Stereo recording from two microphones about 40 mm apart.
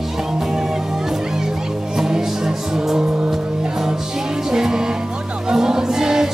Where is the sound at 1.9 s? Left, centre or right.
Centre.